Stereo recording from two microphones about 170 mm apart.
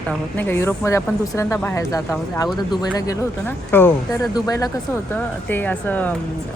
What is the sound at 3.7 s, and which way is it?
A woman's voice, 10° left (ahead or behind).